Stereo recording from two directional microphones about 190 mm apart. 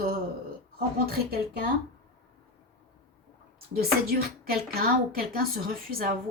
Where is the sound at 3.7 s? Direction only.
55° right (ahead or behind).